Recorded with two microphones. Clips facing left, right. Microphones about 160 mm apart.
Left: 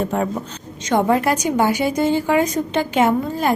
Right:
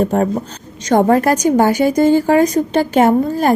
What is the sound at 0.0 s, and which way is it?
A woman's voice, 40° right (ahead or behind).